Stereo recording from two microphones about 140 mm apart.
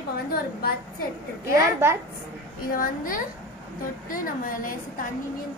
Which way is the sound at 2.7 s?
85° left.